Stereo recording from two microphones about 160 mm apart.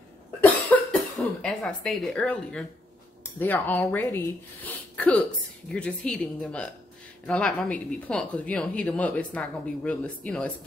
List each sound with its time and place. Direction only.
0.7 s cough: 10° left (ahead or behind)
1.2 s speech: 5° left (ahead or behind)
4.9 s speech: 5° left (ahead or behind)